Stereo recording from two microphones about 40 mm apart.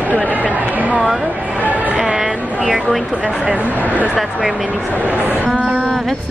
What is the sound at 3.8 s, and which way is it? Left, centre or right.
Speech, right.